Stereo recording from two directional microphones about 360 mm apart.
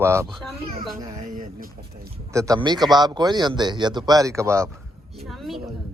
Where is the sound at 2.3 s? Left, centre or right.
Centre.